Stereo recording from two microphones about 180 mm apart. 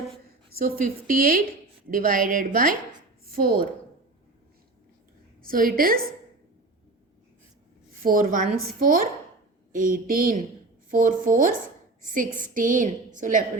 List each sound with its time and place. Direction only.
0.6 s a woman's voice: 50° right (ahead or behind)
5.4 s a woman's voice: 55° right (ahead or behind)
8.0 s a woman's voice: 50° right (ahead or behind)